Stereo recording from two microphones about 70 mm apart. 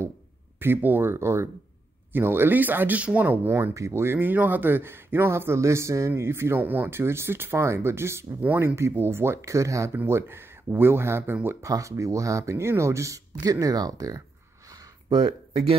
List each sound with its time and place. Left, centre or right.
0.6 s speech: right
3.7 s speech: right
10.0 s speech: right
11.6 s speech: right
13.4 s speech: right
14.7 s a sound: right